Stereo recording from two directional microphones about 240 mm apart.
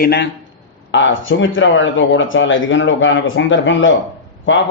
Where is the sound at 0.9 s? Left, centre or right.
Left.